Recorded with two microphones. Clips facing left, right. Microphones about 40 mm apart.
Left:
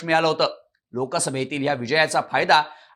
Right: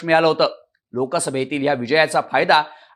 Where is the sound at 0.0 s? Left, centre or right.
Centre.